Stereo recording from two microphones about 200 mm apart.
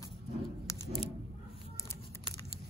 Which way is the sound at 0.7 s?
25° left (ahead or behind).